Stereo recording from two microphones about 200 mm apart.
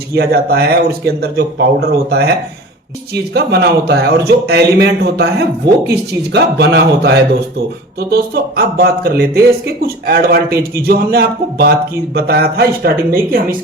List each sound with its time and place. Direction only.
0.2 s speech: 50° right (ahead or behind)
3.3 s a man's voice: 55° right (ahead or behind)
8.1 s speech: 50° right (ahead or behind)